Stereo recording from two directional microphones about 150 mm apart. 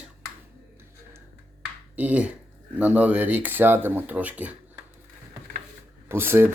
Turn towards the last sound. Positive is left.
turn(degrees=-15)  # may be behind; listen again after turning